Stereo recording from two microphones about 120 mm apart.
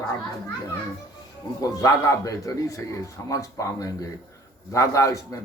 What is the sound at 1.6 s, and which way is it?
Speech, 30° left (ahead or behind).